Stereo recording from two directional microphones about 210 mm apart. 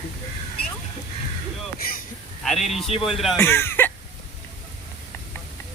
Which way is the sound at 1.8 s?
45° left (ahead or behind).